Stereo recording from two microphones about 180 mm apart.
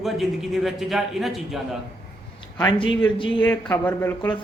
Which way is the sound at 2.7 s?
30° left (ahead or behind).